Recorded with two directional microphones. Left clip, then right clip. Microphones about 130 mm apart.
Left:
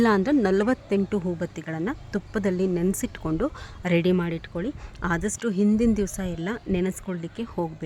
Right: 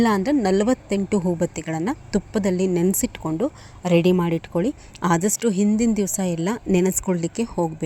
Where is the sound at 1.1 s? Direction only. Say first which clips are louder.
Right 6 dB; 15° right (ahead or behind); by 3.9 s centre (ahead or behind).